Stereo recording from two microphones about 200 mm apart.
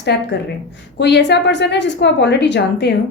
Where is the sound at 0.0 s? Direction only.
55° left (ahead or behind).